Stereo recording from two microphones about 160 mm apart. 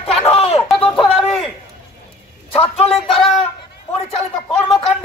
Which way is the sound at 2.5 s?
35° left (ahead or behind).